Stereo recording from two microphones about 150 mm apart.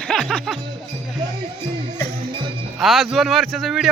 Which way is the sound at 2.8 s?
Centre (ahead or behind).